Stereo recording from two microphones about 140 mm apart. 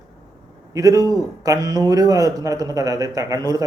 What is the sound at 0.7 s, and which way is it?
A man's voice, 25° right (ahead or behind).